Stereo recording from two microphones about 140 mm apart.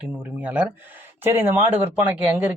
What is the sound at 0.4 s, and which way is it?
Speech, 10° right (ahead or behind).